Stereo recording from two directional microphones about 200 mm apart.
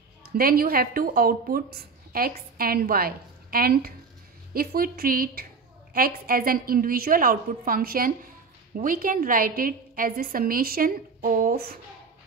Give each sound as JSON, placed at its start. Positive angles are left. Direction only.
{"t": 0.3, "sound": "a woman's voice", "side_deg": -50}